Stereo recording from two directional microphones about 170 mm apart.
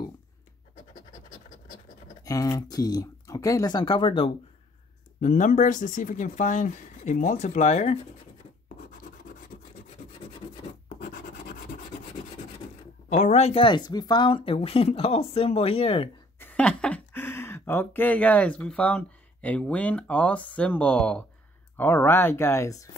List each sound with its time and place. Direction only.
2.2 s speech: 20° left (ahead or behind)
5.2 s speech: 50° left (ahead or behind)
11.0 s a sound: 55° left (ahead or behind)
13.1 s speech: 40° left (ahead or behind)
16.3 s speech: 10° left (ahead or behind)